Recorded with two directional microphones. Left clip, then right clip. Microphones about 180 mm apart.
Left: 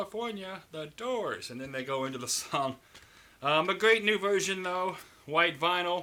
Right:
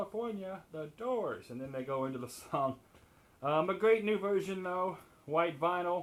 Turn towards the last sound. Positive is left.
turn(degrees=15)  # may be behind; listen again after turning